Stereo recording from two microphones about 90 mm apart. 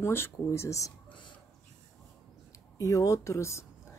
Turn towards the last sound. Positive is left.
turn(degrees=30)  # may be behind; listen again after turning